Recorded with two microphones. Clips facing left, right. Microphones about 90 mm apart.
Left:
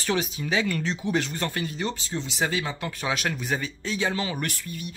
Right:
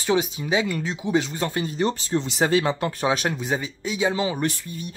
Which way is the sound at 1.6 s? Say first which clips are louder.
Right 6 dB; 35° right (ahead or behind).